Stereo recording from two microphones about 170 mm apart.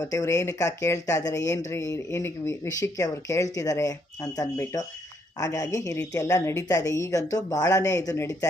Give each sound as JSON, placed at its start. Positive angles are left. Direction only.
{"t": 0.0, "sound": "speech", "side_deg": 20}